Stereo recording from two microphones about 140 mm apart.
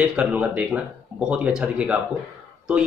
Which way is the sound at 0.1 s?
10° right (ahead or behind).